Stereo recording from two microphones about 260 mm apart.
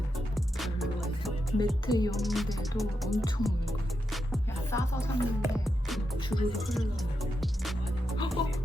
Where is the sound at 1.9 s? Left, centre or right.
Centre.